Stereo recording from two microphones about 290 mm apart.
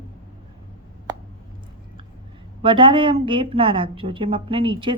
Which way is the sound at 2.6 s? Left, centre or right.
Centre.